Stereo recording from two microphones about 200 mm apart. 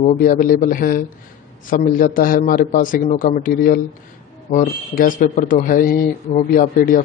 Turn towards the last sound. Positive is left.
turn(degrees=45)  # may be behind; listen again after turning